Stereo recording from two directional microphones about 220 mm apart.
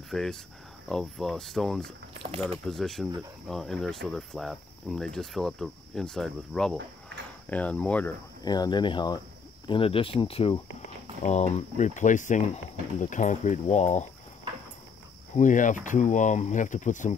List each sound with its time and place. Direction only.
0.1 s speech: centre (ahead or behind)
2.2 s speech: 25° right (ahead or behind)
2.6 s speech: centre (ahead or behind)
8.4 s speech: 20° left (ahead or behind)
15.3 s speech: 35° left (ahead or behind)